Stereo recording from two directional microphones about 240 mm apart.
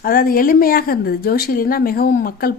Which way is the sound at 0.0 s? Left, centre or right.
Left.